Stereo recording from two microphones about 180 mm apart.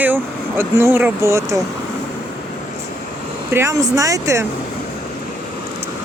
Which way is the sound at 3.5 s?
15° right (ahead or behind).